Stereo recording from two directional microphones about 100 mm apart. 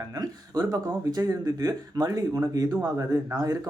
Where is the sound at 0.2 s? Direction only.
40° right (ahead or behind).